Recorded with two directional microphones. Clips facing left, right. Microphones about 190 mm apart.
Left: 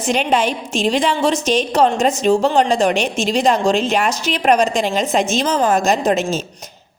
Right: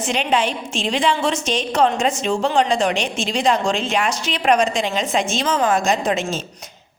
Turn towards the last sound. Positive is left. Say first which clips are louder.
# left 3 dB
turn(degrees=40)  # may be behind; listen again after turning